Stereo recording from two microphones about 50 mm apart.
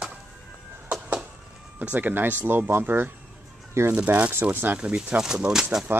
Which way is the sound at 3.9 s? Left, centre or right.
Right.